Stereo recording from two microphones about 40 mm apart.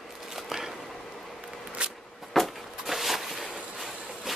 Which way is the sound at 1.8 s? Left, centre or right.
Right.